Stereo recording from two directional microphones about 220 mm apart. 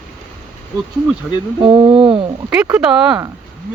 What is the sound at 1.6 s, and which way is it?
Speech, 25° right (ahead or behind).